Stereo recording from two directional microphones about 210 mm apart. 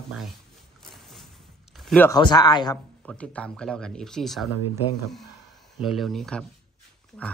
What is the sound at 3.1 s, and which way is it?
Speech, 5° left (ahead or behind).